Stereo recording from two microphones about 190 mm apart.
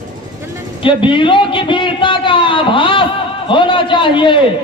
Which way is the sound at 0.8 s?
25° left (ahead or behind).